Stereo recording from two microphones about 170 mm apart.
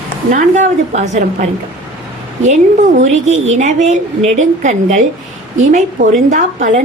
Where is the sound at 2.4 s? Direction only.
45° right (ahead or behind).